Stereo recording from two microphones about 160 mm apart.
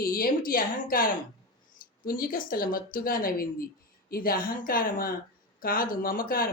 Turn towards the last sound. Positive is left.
turn(degrees=65)  # may be behind; listen again after turning